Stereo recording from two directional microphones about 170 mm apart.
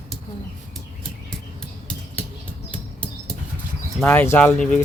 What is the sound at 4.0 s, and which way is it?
Speech, 10° left (ahead or behind).